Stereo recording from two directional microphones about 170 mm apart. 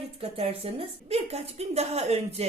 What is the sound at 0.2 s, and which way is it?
A woman's voice, 35° right (ahead or behind).